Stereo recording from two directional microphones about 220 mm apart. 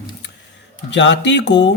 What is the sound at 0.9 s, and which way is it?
Speech, 55° left (ahead or behind).